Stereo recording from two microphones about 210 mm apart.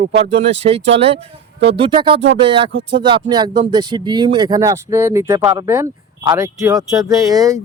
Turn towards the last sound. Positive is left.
turn(degrees=-15)  # may be behind; listen again after turning